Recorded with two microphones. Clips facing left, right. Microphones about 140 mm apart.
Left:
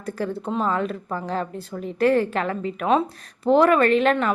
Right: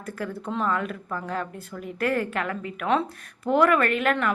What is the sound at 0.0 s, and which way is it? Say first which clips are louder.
A woman's voice: left 5 dB; 30° left (ahead or behind).